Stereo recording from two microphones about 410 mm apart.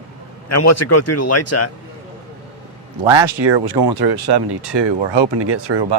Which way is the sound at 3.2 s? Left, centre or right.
Right.